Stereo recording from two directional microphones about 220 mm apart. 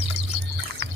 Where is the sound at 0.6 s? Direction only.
60° right (ahead or behind).